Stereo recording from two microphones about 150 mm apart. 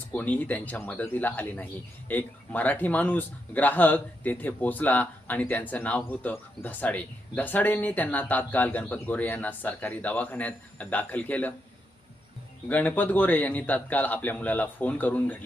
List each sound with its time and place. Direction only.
0.1 s speech: 10° left (ahead or behind)
12.6 s speech: 10° left (ahead or behind)